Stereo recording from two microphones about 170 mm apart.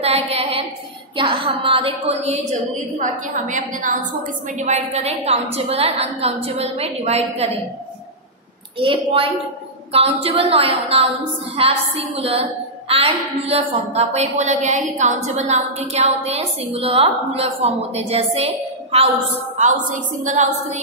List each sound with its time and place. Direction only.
0.0 s a sound: 35° right (ahead or behind)
1.1 s a woman's voice: 30° right (ahead or behind)
8.7 s a woman's voice: 30° right (ahead or behind)
19.5 s a woman's voice: 45° right (ahead or behind)